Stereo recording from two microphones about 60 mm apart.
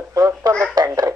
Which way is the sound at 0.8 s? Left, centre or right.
Right.